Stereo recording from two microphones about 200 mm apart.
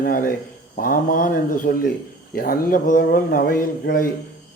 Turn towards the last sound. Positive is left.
turn(degrees=45)  # may be behind; listen again after turning